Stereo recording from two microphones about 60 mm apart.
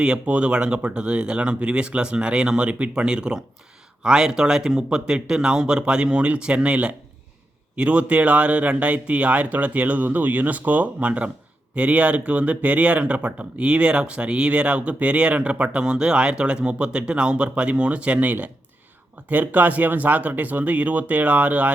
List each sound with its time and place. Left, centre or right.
0.0 s speech: centre